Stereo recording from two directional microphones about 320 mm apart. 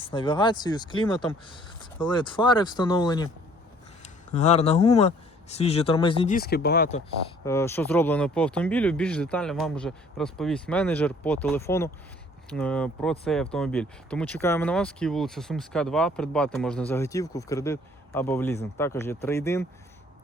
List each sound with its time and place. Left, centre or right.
0.0 s speech: centre
7.4 s speech: centre